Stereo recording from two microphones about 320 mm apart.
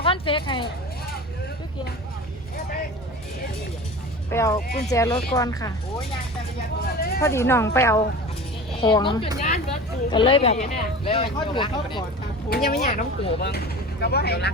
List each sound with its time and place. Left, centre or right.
0.0 s speech: centre
4.3 s speech: centre
7.2 s speech: centre
12.5 s speech: left